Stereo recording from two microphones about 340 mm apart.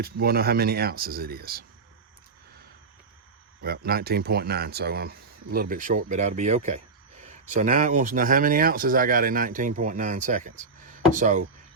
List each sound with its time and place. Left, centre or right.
0.0 s speech: right
3.6 s speech: right